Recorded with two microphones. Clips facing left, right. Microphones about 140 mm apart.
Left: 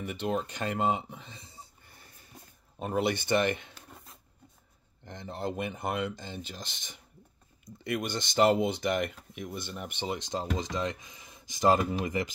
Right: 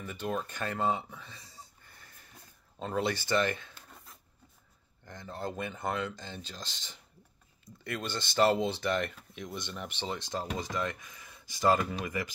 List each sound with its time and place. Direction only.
0.0 s speech: 20° left (ahead or behind)
2.8 s speech: 15° left (ahead or behind)